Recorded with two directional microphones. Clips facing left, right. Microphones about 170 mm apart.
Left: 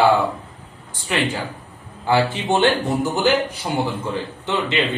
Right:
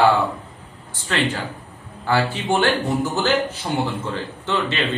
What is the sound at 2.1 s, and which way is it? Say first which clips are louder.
A man's voice: left 2 dB; 20° left (ahead or behind).